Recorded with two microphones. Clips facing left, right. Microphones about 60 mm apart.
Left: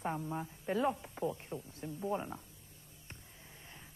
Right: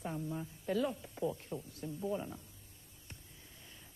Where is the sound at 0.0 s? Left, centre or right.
Left.